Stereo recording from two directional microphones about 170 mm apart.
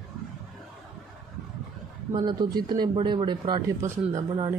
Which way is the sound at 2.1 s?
25° right (ahead or behind).